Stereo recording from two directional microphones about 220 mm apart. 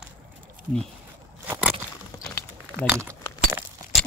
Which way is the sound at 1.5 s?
10° right (ahead or behind).